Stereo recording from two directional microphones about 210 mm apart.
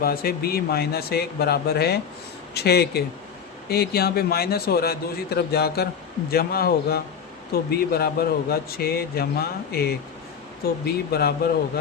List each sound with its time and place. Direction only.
0.0 s speech: 45° left (ahead or behind)